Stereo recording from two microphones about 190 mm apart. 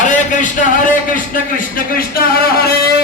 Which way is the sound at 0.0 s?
40° left (ahead or behind).